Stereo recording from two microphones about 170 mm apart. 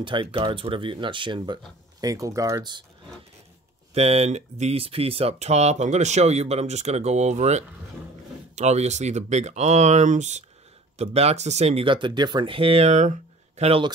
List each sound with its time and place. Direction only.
0.0 s speech: 30° right (ahead or behind)
3.9 s speech: 35° right (ahead or behind)